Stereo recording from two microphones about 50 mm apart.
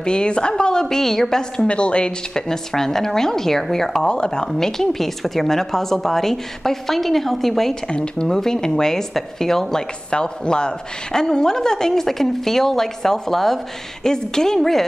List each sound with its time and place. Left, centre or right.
0.0 s speech: centre
1.7 s a woman's voice: left; by 7.7 s centre
7.9 s speech: centre